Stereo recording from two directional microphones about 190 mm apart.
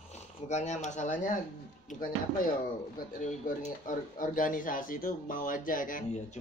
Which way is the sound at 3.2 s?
40° left (ahead or behind).